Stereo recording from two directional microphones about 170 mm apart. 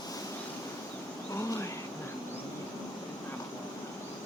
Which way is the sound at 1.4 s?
15° left (ahead or behind).